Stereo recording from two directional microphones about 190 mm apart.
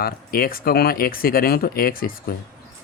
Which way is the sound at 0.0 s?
50° left (ahead or behind).